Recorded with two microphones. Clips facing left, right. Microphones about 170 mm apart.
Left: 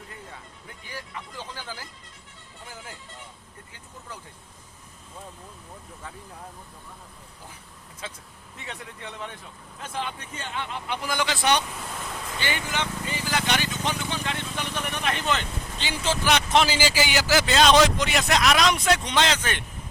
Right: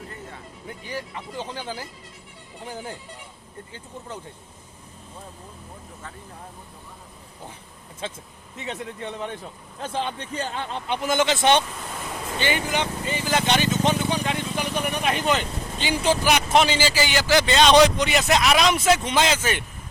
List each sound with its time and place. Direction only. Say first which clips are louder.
0.9 s speech: right 5 dB; 20° right (ahead or behind)
2.6 s speech: right 9 dB; 30° right (ahead or behind)
8.0 s speech: right 6 dB; 25° right (ahead or behind)
10.8 s speech: right 7 dB; 20° right (ahead or behind)
12.4 s a sound: right 5 dB; 20° right (ahead or behind)
16.6 s a man's voice: right 2 dB; 10° left (ahead or behind); by 19.6 s 5° right (ahead or behind)